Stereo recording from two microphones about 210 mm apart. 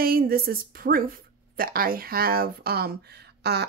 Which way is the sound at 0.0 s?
45° right (ahead or behind).